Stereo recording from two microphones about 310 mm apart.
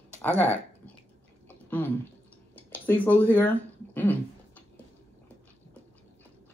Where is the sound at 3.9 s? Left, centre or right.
Centre.